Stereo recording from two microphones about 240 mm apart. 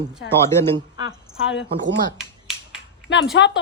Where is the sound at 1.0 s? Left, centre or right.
Left.